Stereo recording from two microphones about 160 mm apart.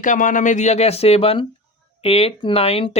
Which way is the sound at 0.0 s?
55° left (ahead or behind).